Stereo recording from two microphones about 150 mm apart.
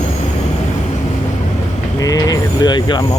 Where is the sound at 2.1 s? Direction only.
25° left (ahead or behind).